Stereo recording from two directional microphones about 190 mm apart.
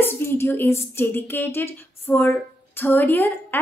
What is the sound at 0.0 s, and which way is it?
Speech, 10° left (ahead or behind).